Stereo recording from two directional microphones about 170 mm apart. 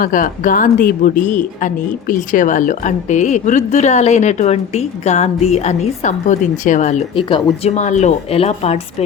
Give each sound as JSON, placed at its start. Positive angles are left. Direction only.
{"t": 0.0, "sound": "a woman's voice", "side_deg": 50}
{"t": 7.2, "sound": "speech", "side_deg": 30}